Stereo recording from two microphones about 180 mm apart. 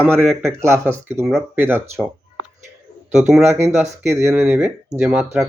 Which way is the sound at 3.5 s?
35° right (ahead or behind).